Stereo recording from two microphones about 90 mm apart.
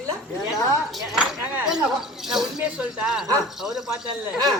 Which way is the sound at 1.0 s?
5° right (ahead or behind).